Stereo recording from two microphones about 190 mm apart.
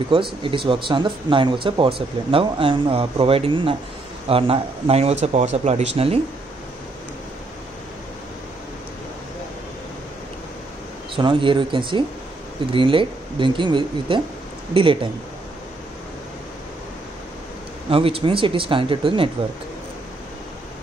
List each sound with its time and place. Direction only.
0.1 s speech: 25° right (ahead or behind)
11.1 s speech: 25° right (ahead or behind)
17.8 s speech: 30° right (ahead or behind)